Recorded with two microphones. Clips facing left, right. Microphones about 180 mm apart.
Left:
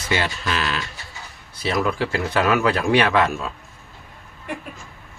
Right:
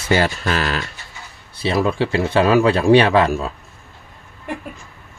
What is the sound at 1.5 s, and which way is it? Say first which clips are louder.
Speech: right 4 dB; 30° right (ahead or behind).